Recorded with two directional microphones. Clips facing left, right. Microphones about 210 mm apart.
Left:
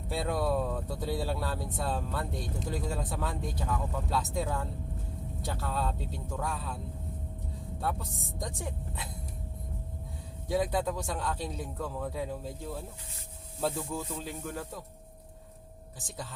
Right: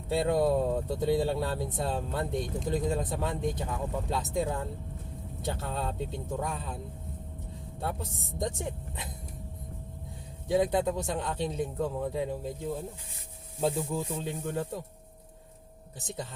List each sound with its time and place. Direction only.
0.1 s speech: 20° right (ahead or behind)
8.4 s speech: 25° right (ahead or behind)
10.5 s speech: 20° right (ahead or behind)
16.0 s speech: 20° right (ahead or behind)